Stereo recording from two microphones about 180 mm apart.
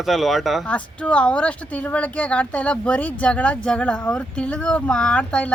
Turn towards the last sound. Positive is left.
turn(degrees=5)  # may be behind; listen again after turning